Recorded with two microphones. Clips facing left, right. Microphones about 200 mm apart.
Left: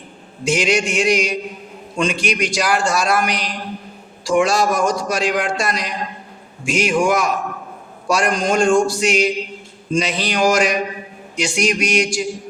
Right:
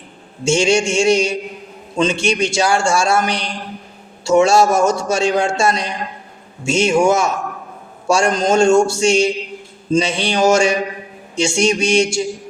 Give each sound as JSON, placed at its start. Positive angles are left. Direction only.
{"t": 0.4, "sound": "a man's voice", "side_deg": -25}